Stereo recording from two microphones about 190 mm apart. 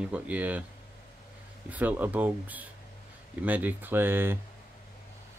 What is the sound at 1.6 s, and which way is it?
Speech, 10° right (ahead or behind).